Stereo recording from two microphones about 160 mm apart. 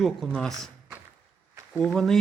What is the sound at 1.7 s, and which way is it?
Speech, 5° left (ahead or behind).